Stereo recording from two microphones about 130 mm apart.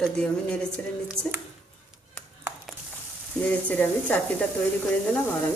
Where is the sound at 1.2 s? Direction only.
45° right (ahead or behind).